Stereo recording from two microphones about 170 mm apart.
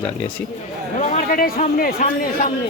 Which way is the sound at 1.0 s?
50° left (ahead or behind).